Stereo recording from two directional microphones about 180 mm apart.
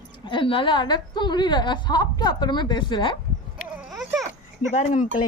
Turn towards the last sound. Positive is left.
turn(degrees=40)  # may be behind; listen again after turning